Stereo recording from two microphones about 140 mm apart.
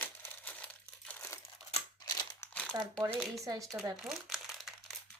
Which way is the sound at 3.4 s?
25° right (ahead or behind).